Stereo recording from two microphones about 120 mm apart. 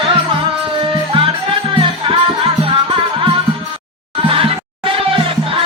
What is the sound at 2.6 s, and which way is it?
Music, 45° right (ahead or behind).